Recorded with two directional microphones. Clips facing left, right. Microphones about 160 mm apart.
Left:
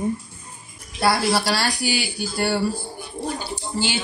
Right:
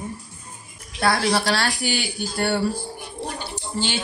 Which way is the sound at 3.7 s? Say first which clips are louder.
Left 1 dB; 5° left (ahead or behind).